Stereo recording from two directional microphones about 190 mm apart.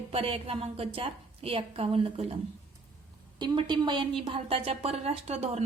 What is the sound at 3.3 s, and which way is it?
A woman's voice, 25° right (ahead or behind).